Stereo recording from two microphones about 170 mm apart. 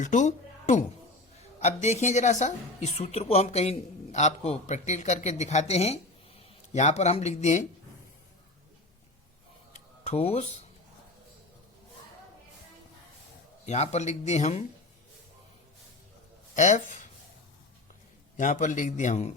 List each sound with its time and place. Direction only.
0.0 s a woman's voice: 45° left (ahead or behind)
9.7 s a sound: 40° left (ahead or behind)
13.7 s a woman's voice: 40° left (ahead or behind)
16.6 s speech: 45° left (ahead or behind)
18.3 s a man's voice: 50° left (ahead or behind)